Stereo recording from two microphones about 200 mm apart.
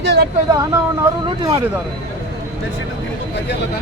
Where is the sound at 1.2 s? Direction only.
20° right (ahead or behind).